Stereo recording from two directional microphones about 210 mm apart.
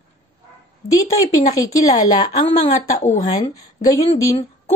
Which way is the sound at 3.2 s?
15° left (ahead or behind).